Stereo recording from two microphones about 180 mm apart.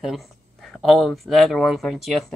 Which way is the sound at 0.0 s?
Centre (ahead or behind).